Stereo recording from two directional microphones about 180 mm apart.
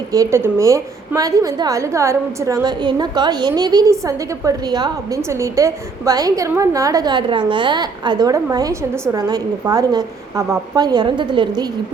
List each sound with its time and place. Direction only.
0.1 s a woman's voice: 15° right (ahead or behind)